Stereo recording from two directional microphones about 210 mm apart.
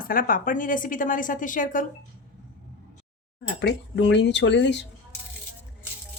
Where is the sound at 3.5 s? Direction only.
55° left (ahead or behind).